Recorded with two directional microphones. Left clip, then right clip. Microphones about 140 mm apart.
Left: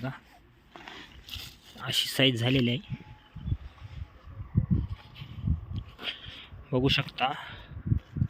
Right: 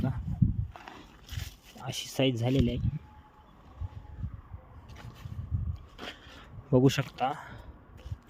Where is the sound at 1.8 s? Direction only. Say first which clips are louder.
Left 5 dB; centre (ahead or behind).